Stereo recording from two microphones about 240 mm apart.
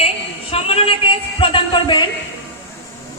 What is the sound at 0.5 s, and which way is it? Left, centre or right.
Female singing, left.